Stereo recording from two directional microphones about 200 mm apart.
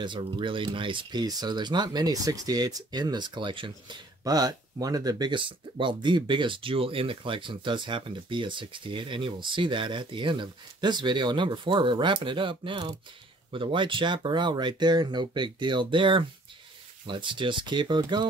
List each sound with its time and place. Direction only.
0.0 s speech: 25° right (ahead or behind)